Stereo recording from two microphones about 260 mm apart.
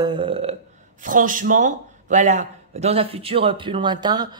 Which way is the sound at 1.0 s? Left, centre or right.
Right.